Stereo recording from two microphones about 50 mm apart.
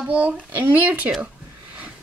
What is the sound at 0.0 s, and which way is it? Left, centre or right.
Speech, right.